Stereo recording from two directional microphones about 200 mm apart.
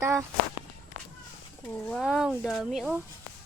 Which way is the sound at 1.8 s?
Centre (ahead or behind).